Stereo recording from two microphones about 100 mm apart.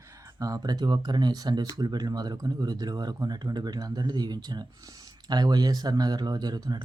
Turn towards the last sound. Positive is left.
turn(degrees=-45)  # may be behind; listen again after turning